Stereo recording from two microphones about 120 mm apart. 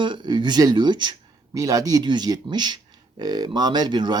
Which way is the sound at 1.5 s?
30° right (ahead or behind).